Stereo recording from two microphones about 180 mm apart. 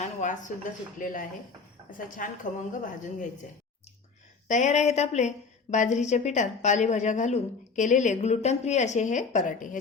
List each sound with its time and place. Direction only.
0.0 s a sound: 45° left (ahead or behind)
0.9 s a woman's voice: 50° left (ahead or behind)
4.4 s a woman's voice: 40° left (ahead or behind)